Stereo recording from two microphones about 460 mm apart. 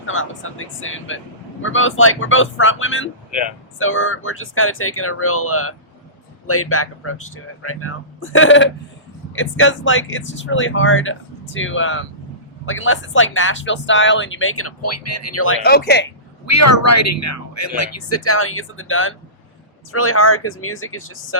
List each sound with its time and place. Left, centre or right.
0.0 s speech: left
16.5 s speech: left